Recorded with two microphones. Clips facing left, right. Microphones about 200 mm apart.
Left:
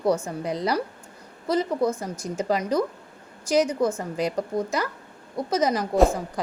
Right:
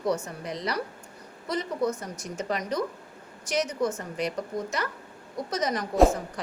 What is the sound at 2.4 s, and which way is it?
A woman's voice, 30° left (ahead or behind).